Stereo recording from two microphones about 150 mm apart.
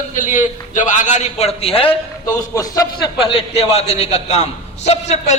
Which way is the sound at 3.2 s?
40° left (ahead or behind).